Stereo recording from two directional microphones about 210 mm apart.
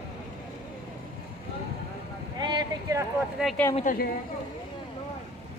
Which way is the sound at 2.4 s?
20° right (ahead or behind).